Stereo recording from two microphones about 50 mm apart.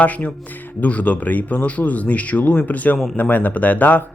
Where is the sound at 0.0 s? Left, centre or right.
Left.